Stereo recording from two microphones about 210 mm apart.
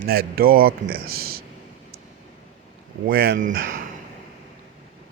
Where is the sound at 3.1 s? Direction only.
50° right (ahead or behind).